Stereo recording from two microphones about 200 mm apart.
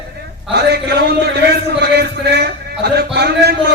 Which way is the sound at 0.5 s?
55° right (ahead or behind).